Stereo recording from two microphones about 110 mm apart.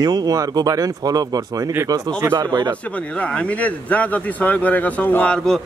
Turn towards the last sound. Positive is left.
turn(degrees=5)  # may be behind; listen again after turning